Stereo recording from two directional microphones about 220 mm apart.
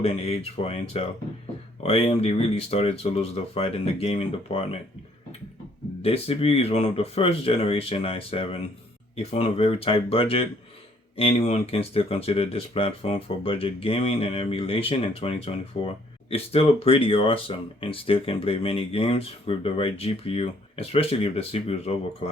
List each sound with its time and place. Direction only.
0.0 s speech: 25° left (ahead or behind)
6.0 s speech: 25° left (ahead or behind)